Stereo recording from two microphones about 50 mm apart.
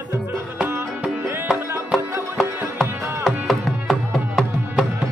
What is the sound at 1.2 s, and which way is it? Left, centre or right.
Music, right.